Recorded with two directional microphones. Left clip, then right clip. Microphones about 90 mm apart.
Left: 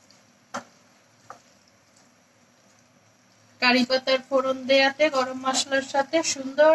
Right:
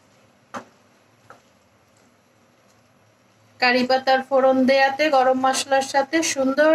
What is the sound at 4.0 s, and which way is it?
Speech, 30° right (ahead or behind).